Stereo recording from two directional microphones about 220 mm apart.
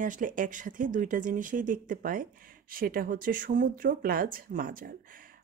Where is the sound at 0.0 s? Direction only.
35° right (ahead or behind).